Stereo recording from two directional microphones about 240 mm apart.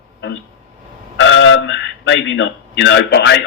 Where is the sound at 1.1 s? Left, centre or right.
Left.